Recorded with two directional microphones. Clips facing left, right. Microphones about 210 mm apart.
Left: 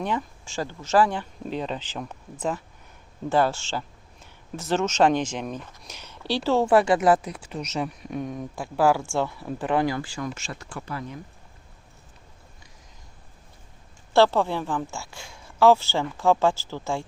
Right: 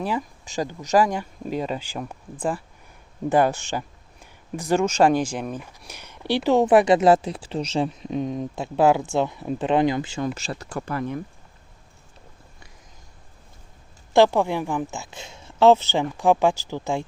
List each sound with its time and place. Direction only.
0.0 s speech: 10° right (ahead or behind)
3.2 s speech: 15° right (ahead or behind); by 11.2 s 60° right (ahead or behind)
14.1 s speech: 15° right (ahead or behind)